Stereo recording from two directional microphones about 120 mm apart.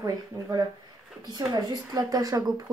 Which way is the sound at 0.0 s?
30° right (ahead or behind).